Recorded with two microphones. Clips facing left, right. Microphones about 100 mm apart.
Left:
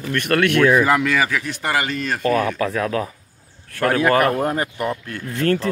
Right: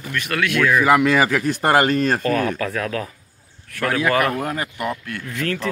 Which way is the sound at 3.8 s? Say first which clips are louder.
Left 3 dB; 35° left (ahead or behind).